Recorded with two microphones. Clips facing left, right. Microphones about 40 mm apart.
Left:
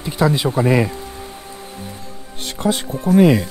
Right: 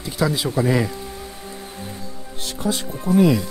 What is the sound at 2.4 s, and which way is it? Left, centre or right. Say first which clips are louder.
Speech: left 4 dB; left.